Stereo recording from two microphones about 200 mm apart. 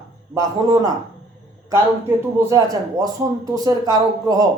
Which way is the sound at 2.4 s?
15° right (ahead or behind).